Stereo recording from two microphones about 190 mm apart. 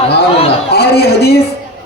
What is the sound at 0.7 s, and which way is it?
Speech, 60° left (ahead or behind).